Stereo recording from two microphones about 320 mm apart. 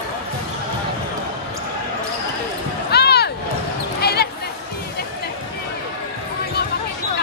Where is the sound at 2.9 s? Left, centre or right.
Left.